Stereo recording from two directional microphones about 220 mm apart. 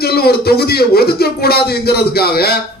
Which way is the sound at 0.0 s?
45° left (ahead or behind).